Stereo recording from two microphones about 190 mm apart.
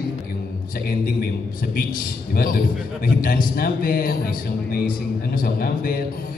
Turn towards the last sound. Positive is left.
turn(degrees=50)  # may be behind; listen again after turning